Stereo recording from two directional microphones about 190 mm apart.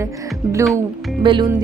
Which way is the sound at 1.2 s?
25° right (ahead or behind).